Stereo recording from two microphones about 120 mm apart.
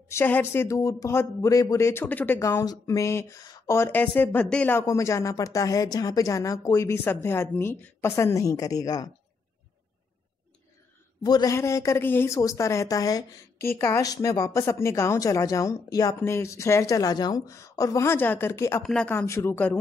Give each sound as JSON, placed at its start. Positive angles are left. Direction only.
{"t": 0.1, "sound": "a woman's voice", "side_deg": 15}
{"t": 2.6, "sound": "a woman's voice", "side_deg": 30}
{"t": 4.7, "sound": "a woman's voice", "side_deg": 25}
{"t": 11.2, "sound": "a man's voice", "side_deg": 35}
{"t": 11.5, "sound": "a woman's voice", "side_deg": 25}
{"t": 18.8, "sound": "speech", "side_deg": 10}
{"t": 19.1, "sound": "a woman's voice", "side_deg": 20}